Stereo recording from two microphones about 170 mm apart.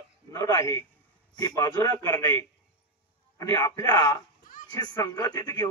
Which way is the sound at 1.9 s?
10° left (ahead or behind).